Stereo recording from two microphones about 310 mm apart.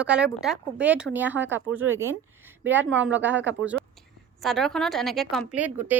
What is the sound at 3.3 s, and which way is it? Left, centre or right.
Speech, right.